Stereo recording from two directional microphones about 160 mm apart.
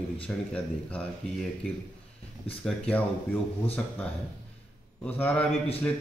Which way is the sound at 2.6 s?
5° left (ahead or behind).